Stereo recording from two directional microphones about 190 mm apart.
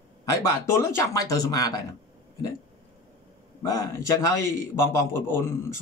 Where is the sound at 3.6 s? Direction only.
15° left (ahead or behind).